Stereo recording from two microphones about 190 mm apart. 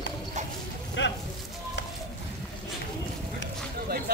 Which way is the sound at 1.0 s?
70° left (ahead or behind).